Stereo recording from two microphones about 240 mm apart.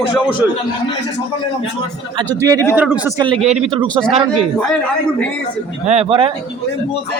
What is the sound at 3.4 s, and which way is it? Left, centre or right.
Speech, right.